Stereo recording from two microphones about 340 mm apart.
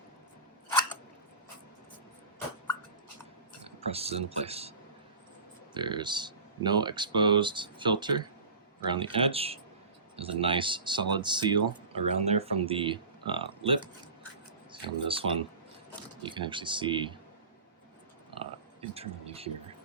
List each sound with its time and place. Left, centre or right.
3.8 s speech: centre
5.7 s speech: centre
18.8 s speech: centre